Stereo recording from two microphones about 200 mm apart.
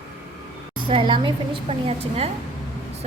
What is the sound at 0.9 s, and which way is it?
Speech, 25° right (ahead or behind).